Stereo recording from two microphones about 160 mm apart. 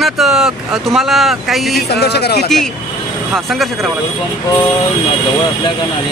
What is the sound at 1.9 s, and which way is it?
Speech, 90° left.